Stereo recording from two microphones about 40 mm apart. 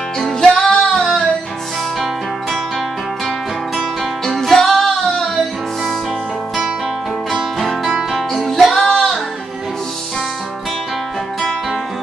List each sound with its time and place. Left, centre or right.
0.2 s music: centre
3.3 s music: centre
7.5 s music: centre